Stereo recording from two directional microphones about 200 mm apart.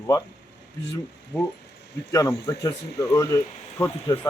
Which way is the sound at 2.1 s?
15° left (ahead or behind).